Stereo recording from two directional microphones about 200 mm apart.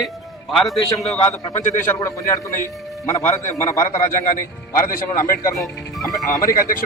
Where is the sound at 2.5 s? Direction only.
10° left (ahead or behind).